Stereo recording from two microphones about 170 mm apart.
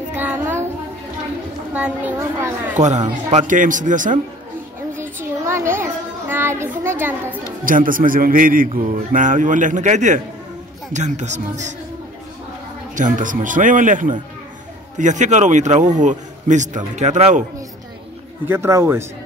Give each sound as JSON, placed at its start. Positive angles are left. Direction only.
{"t": 0.1, "sound": "child singing", "side_deg": -10}
{"t": 1.7, "sound": "a woman's voice", "side_deg": -10}
{"t": 3.3, "sound": "a man's voice", "side_deg": -45}
{"t": 4.9, "sound": "child singing", "side_deg": -15}
{"t": 7.6, "sound": "a man's voice", "side_deg": -55}
{"t": 12.9, "sound": "a man's voice", "side_deg": -50}
{"t": 18.5, "sound": "a woman's voice", "side_deg": -15}